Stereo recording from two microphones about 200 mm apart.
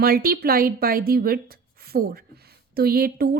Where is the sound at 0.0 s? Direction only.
50° right (ahead or behind).